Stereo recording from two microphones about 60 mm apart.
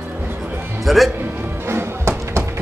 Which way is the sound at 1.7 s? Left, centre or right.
Right.